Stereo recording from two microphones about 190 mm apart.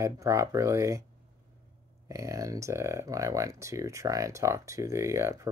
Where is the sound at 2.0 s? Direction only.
15° right (ahead or behind).